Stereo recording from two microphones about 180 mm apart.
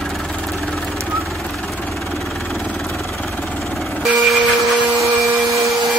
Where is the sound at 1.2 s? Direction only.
Centre (ahead or behind).